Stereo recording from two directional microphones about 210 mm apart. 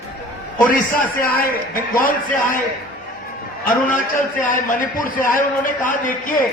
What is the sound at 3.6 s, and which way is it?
A man's voice, 40° left (ahead or behind).